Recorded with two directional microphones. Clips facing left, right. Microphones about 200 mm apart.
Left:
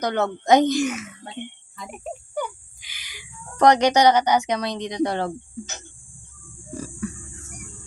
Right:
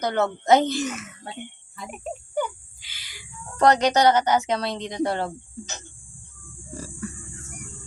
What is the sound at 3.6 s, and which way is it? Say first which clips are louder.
A woman's voice: left 2 dB; 15° left (ahead or behind).